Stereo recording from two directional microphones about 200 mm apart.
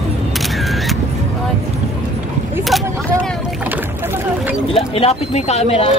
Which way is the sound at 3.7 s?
10° right (ahead or behind).